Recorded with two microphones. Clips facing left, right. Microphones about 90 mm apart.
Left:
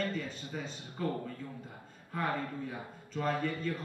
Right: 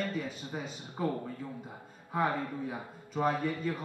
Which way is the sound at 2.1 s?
15° right (ahead or behind).